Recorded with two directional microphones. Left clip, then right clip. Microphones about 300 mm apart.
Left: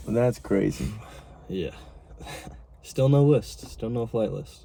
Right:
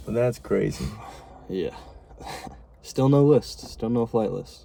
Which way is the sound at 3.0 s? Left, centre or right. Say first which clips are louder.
Right 3 dB; centre.